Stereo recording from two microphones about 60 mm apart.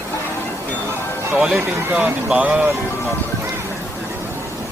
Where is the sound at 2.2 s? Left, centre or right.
Right.